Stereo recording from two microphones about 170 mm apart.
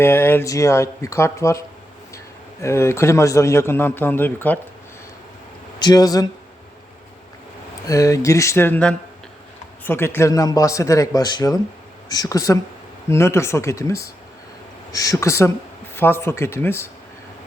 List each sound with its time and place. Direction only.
0.0 s a man's voice: 15° left (ahead or behind)
5.8 s a man's voice: 20° left (ahead or behind)
7.9 s a man's voice: 20° left (ahead or behind)